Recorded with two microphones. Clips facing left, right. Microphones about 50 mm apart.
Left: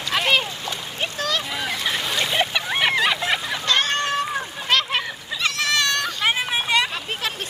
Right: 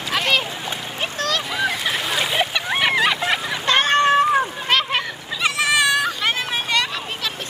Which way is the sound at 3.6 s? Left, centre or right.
Right.